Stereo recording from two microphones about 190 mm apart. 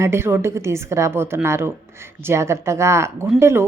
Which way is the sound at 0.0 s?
15° right (ahead or behind).